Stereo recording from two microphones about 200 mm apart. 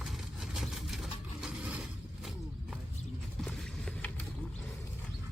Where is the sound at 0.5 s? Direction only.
Centre (ahead or behind).